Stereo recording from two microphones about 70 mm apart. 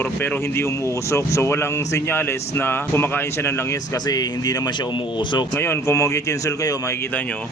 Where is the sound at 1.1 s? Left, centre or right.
Left.